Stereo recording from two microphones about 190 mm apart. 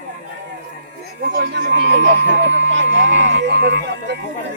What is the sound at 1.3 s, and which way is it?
Speech, 65° right (ahead or behind).